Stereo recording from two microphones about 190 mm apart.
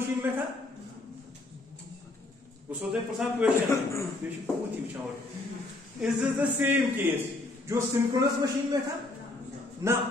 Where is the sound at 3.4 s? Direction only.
5° right (ahead or behind).